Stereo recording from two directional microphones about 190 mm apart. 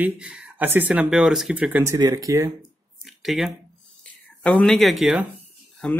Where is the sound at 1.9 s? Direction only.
20° right (ahead or behind).